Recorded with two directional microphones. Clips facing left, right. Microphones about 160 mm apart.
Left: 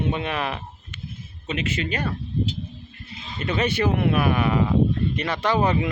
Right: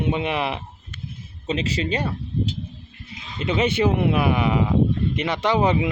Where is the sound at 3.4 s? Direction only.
20° right (ahead or behind).